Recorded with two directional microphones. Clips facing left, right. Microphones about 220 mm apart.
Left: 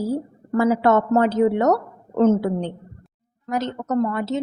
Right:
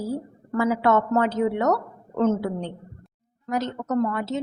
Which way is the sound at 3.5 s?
25° left (ahead or behind).